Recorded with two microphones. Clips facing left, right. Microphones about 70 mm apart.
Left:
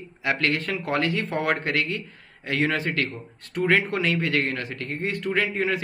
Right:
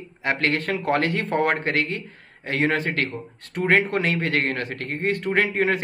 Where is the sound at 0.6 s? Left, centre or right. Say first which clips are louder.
Right 3 dB; right.